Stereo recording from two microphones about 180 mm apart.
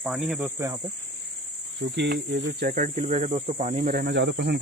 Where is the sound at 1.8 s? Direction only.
70° right (ahead or behind).